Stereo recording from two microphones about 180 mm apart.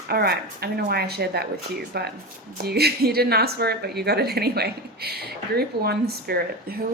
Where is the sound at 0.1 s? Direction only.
60° right (ahead or behind).